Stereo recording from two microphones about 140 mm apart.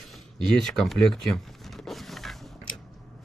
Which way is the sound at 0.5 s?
5° left (ahead or behind).